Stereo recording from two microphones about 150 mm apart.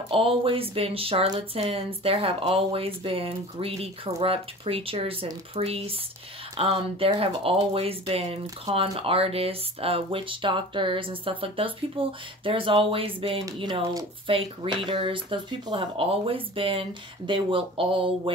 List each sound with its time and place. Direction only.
0.1 s speech: 35° right (ahead or behind)